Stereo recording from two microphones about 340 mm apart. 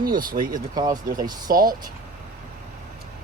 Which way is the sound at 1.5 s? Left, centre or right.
Right.